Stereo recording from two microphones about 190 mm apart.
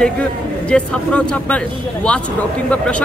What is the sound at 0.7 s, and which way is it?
Speech, 5° left (ahead or behind).